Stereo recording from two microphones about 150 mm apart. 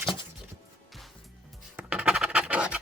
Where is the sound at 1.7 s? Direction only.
10° right (ahead or behind).